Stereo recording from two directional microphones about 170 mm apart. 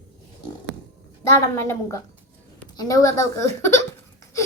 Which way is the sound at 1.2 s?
15° left (ahead or behind).